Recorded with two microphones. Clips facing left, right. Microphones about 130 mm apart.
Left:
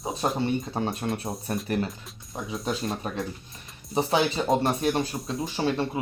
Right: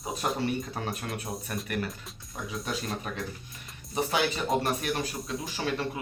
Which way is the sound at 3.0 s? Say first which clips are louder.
Left 4 dB; 35° left (ahead or behind).